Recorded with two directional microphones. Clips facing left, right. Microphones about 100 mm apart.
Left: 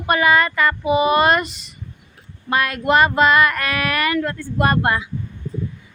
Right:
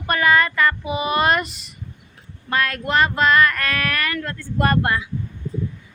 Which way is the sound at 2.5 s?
15° left (ahead or behind).